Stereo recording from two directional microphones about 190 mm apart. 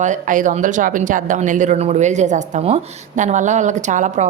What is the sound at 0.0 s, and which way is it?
Speech, 40° right (ahead or behind).